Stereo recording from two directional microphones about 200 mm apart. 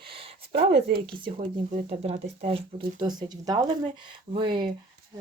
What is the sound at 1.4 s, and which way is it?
Speech, 30° right (ahead or behind).